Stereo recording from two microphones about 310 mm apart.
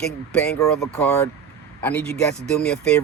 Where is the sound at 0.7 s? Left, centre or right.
Centre.